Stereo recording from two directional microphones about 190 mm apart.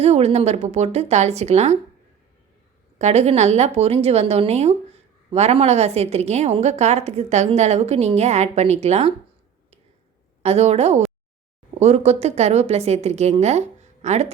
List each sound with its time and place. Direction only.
0.0 s a woman's voice: 35° right (ahead or behind)
3.0 s a woman's voice: 35° right (ahead or behind)
10.4 s a woman's voice: 35° right (ahead or behind)